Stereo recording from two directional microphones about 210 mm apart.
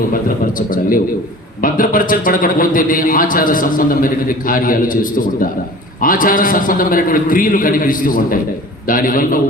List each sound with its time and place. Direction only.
0.1 s a man's voice: 40° left (ahead or behind)